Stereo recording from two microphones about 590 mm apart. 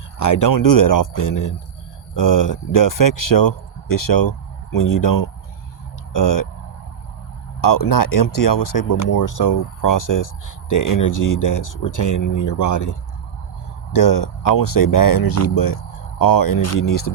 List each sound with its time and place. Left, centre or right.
0.2 s speech: left
7.6 s speech: left